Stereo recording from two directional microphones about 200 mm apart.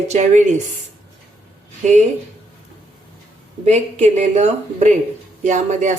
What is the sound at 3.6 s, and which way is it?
A woman's voice, 35° right (ahead or behind).